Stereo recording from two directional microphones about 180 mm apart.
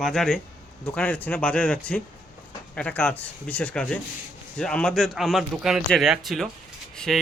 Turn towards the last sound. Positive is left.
turn(degrees=0)  # may be behind; listen again after turning